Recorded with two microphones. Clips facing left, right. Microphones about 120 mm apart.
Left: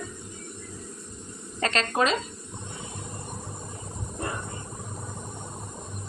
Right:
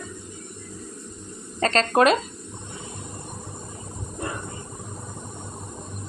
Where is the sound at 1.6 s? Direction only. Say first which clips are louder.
Right 5 dB; 35° right (ahead or behind).